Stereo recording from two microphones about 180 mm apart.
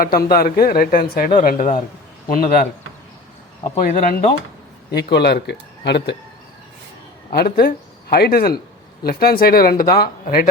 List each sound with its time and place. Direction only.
0.3 s speech: 55° left (ahead or behind)
1.4 s speech: 45° left (ahead or behind)
3.8 s speech: 50° left (ahead or behind)
4.9 s speech: 65° left (ahead or behind)
7.3 s speech: 55° left (ahead or behind)